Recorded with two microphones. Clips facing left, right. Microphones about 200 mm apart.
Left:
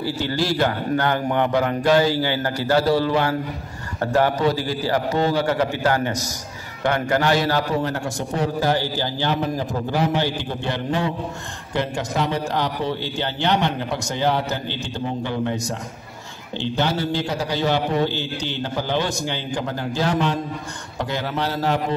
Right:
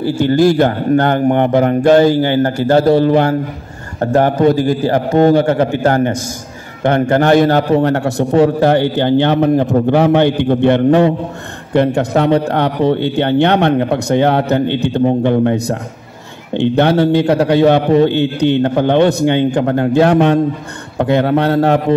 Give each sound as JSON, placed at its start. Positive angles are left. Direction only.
{"t": 0.0, "sound": "a man's voice", "side_deg": -50}